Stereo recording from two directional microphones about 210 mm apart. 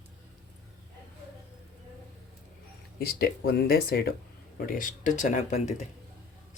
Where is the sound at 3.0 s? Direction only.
45° left (ahead or behind).